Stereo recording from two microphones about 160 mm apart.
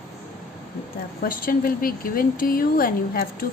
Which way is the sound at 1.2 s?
65° left (ahead or behind).